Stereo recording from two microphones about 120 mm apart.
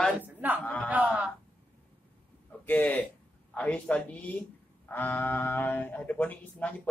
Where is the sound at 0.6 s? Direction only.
15° left (ahead or behind).